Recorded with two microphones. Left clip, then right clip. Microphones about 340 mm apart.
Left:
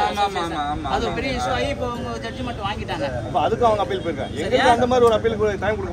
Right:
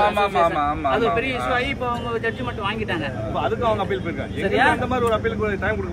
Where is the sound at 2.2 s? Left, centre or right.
Centre.